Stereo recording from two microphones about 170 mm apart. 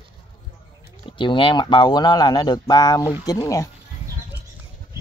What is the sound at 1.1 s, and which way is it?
Speech, 30° left (ahead or behind).